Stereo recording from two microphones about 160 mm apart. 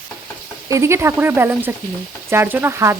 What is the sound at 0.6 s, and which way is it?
Speech, 20° right (ahead or behind).